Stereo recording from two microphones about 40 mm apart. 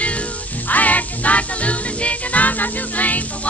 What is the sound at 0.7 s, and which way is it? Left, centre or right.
Music, left.